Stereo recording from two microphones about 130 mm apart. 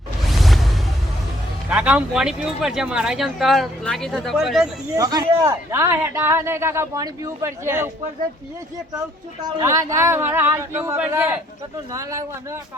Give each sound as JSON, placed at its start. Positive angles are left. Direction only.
{"t": 0.3, "sound": "music", "side_deg": 0}
{"t": 1.7, "sound": "speech", "side_deg": -10}
{"t": 4.9, "sound": "a man's voice", "side_deg": -30}
{"t": 9.4, "sound": "a man's voice", "side_deg": -25}